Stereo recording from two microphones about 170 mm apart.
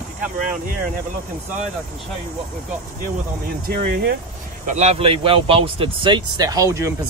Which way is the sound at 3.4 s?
65° right (ahead or behind).